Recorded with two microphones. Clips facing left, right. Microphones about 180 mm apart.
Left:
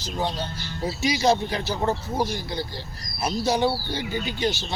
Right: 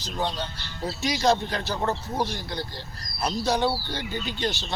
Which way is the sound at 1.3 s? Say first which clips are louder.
Left 2 dB; 15° left (ahead or behind).